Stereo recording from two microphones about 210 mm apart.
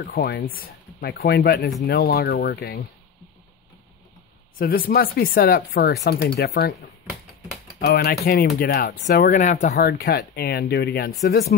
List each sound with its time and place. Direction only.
0.0 s speech: 50° left (ahead or behind)
4.6 s speech: 45° left (ahead or behind)
9.8 s speech: 45° left (ahead or behind)